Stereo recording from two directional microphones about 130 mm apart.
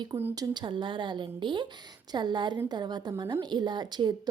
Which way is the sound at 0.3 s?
35° right (ahead or behind).